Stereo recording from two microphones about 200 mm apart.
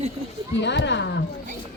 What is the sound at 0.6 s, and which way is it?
Speech, 60° left (ahead or behind).